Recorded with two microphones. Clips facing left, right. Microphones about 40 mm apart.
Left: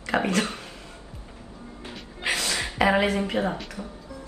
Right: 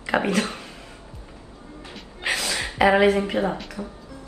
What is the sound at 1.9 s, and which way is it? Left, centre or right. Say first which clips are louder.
Music: right 1 dB; centre.